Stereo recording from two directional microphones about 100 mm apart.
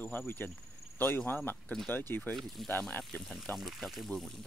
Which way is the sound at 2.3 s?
Centre (ahead or behind).